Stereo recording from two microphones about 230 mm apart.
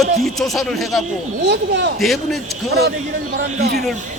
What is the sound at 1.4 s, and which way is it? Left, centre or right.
Speech, right.